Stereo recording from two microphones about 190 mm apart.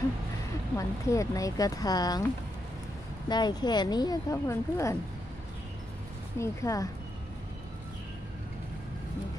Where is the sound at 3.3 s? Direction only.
20° left (ahead or behind).